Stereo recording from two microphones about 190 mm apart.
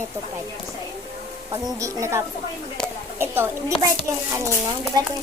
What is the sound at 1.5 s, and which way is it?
Speech, 15° right (ahead or behind).